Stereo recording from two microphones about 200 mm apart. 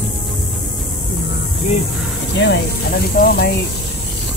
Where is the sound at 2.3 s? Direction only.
60° left (ahead or behind).